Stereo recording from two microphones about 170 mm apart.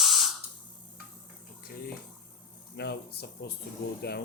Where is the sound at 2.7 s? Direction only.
75° left (ahead or behind).